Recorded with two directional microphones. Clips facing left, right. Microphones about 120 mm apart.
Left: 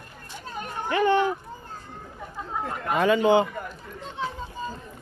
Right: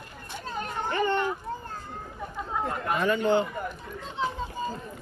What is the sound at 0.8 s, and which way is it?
Speech, 90° left.